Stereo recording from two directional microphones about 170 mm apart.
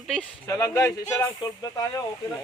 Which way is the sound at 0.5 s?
20° left (ahead or behind).